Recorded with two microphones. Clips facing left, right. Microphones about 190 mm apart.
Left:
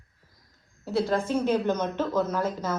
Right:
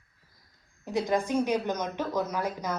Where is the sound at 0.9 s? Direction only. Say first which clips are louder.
Left 2 dB; 15° right (ahead or behind).